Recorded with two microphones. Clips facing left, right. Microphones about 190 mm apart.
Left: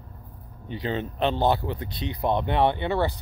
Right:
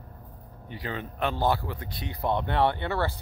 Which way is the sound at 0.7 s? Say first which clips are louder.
Left 6 dB; 25° left (ahead or behind).